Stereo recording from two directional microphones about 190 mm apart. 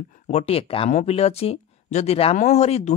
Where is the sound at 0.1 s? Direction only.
35° left (ahead or behind).